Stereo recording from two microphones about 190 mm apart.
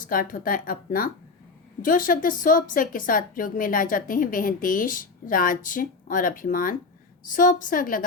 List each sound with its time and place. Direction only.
0.0 s a woman's voice: 45° left (ahead or behind)